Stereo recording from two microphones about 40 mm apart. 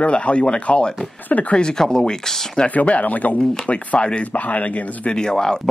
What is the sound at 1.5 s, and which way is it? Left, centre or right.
Speech, centre.